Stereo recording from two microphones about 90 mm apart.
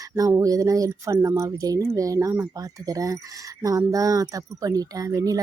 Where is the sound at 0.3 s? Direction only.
40° right (ahead or behind).